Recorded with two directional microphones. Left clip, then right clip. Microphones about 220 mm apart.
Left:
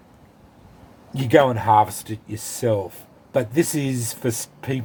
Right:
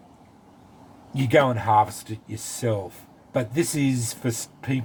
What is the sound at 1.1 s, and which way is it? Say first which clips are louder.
Speech: left 3 dB; 35° left (ahead or behind).